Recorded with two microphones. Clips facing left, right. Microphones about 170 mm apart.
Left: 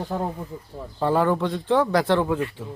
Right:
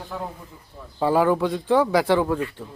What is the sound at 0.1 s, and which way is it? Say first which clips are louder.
Speech: left 4 dB; 40° left (ahead or behind).